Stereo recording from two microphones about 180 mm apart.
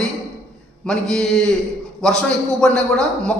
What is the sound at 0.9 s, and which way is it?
A man's voice, 5° left (ahead or behind).